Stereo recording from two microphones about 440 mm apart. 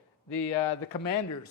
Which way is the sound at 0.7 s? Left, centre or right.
Left.